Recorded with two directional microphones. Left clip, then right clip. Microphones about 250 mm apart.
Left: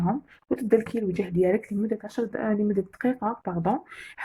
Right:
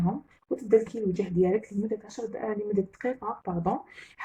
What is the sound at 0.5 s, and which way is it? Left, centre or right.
Speech, left.